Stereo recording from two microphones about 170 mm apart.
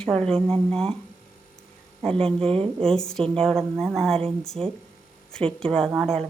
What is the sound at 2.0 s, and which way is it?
A woman's voice, 5° left (ahead or behind).